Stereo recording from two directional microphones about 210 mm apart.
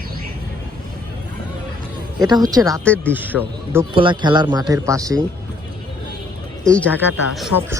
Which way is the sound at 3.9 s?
25° right (ahead or behind).